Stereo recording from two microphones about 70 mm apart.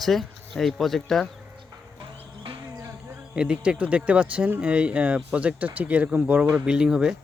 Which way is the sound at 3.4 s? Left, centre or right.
Centre.